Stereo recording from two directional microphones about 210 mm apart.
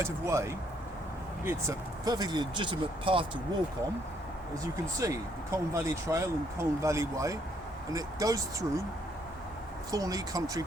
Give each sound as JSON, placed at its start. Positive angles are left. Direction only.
{"t": 0.0, "sound": "speech", "side_deg": -15}
{"t": 4.5, "sound": "speech", "side_deg": -15}
{"t": 9.9, "sound": "speech", "side_deg": -15}